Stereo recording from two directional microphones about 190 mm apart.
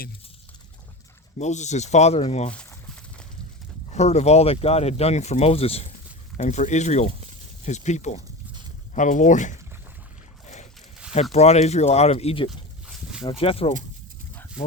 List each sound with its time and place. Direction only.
1.4 s speech: 35° left (ahead or behind)
2.5 s speech: 5° left (ahead or behind)
3.9 s speech: 35° left (ahead or behind)
10.4 s boat: 40° left (ahead or behind)
11.1 s speech: 35° left (ahead or behind)
12.5 s a sound: centre (ahead or behind)
13.2 s speech: 30° left (ahead or behind)